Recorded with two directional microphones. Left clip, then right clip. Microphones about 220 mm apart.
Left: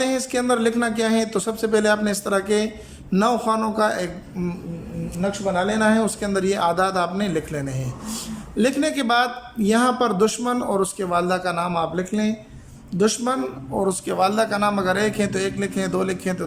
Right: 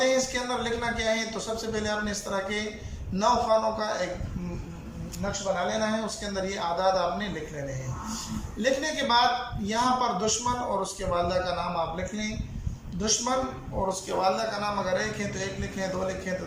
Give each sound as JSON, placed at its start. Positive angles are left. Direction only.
{"t": 0.0, "sound": "speech", "side_deg": 55}
{"t": 5.3, "sound": "speech", "side_deg": 55}
{"t": 8.5, "sound": "a man's voice", "side_deg": 55}